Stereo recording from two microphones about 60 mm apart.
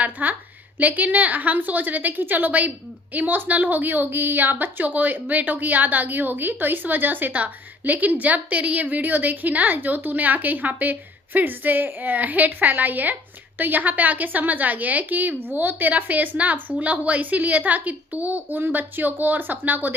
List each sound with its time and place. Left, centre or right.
0.0 s a woman's voice: right